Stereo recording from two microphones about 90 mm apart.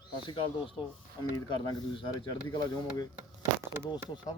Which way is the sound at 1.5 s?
65° left (ahead or behind).